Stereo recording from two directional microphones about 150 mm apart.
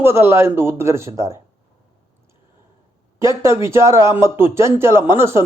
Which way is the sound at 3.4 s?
20° right (ahead or behind).